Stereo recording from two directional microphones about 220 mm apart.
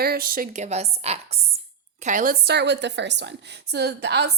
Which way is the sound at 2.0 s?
35° right (ahead or behind).